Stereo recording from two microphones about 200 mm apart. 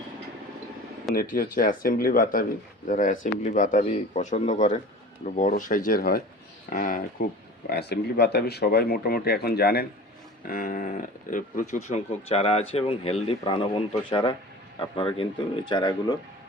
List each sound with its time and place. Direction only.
1.1 s speech: 45° left (ahead or behind); by 16.1 s 20° left (ahead or behind)